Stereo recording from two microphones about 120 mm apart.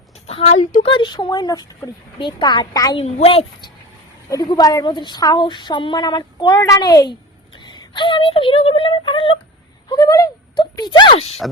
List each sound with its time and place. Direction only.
0.5 s speech: 85° left
0.9 s speech: 40° left (ahead or behind)
3.0 s a woman's voice: 55° left (ahead or behind)
4.3 s speech: 30° left (ahead or behind)
9.9 s speech: 30° left (ahead or behind)